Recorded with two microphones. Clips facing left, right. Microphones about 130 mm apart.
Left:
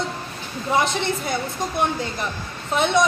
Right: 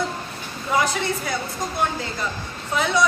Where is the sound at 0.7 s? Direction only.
25° left (ahead or behind).